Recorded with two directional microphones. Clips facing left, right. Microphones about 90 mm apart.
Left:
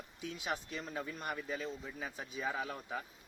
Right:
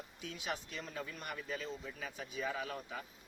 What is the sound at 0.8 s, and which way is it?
A man's voice, 30° left (ahead or behind).